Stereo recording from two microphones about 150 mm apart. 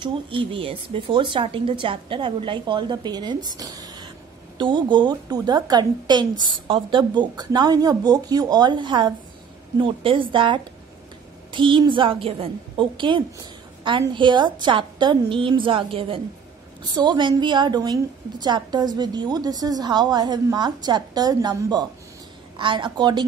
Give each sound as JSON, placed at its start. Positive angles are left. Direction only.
{"t": 0.0, "sound": "a woman's voice", "side_deg": -35}
{"t": 3.4, "sound": "a sound", "side_deg": -25}
{"t": 4.6, "sound": "a woman's voice", "side_deg": -30}